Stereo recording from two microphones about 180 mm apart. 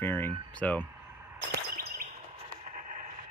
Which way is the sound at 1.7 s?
55° right (ahead or behind).